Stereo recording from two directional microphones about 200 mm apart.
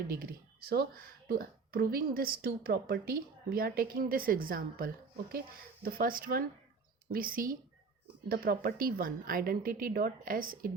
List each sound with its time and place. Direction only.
0.7 s a woman's voice: 50° right (ahead or behind)